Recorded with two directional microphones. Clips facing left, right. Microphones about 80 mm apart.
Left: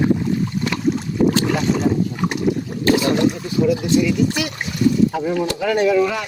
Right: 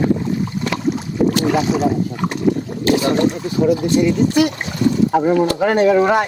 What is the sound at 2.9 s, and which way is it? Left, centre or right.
Speech, right.